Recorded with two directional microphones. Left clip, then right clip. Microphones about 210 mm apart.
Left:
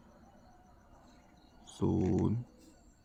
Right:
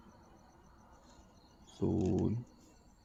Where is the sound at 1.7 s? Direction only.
25° left (ahead or behind).